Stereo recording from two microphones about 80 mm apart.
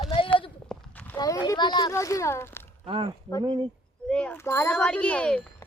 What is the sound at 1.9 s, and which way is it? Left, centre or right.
Speech, left.